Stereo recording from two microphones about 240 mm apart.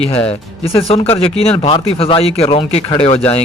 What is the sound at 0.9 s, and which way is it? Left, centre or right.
Speech, left.